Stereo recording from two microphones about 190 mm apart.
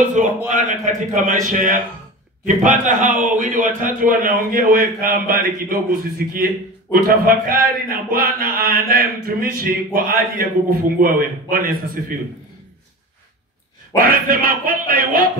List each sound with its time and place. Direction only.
0.5 s a man's voice: 45° right (ahead or behind)
13.9 s a man's voice: 50° right (ahead or behind)